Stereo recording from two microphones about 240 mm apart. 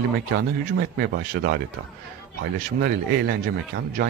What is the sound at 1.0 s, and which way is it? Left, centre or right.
Speech, right.